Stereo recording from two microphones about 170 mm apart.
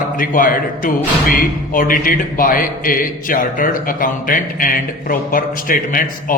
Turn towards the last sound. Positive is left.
turn(degrees=50)  # may be behind; listen again after turning